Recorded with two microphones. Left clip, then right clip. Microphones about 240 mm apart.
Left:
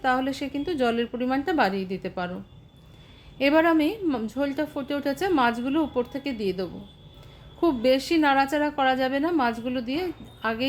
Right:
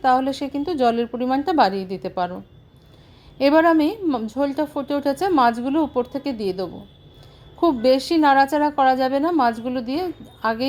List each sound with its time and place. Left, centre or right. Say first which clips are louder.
0.0 s a woman's voice: right 6 dB; centre
3.3 s a woman's voice: right 5 dB; centre